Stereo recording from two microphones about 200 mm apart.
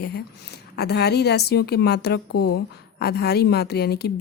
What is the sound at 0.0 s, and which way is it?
A woman's voice, 55° left (ahead or behind).